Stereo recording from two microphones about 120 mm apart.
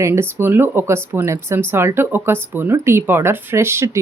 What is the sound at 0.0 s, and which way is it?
Speech, 20° right (ahead or behind).